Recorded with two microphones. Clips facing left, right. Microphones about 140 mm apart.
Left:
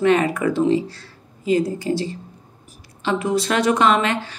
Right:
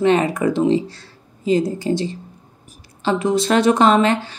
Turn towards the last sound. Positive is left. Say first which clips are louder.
# right 3 dB
turn(degrees=-30)  # may be behind; listen again after turning